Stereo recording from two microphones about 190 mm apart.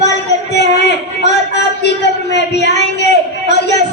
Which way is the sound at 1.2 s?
65° left (ahead or behind).